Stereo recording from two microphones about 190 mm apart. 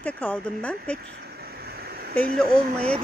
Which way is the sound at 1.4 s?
55° right (ahead or behind).